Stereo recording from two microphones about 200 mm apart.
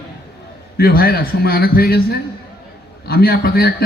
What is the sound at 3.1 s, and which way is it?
Speech, 50° left (ahead or behind).